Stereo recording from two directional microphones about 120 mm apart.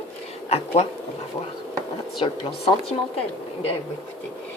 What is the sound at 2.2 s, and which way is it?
Speech, 50° left (ahead or behind).